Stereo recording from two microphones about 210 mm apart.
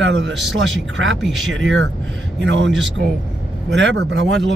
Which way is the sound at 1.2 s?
Centre (ahead or behind).